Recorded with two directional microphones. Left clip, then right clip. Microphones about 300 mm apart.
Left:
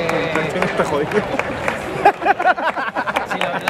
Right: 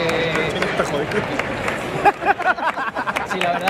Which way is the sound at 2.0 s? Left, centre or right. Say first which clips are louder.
Left 3 dB; left.